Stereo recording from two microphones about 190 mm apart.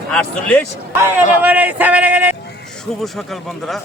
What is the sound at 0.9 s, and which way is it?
Speech, 10° right (ahead or behind).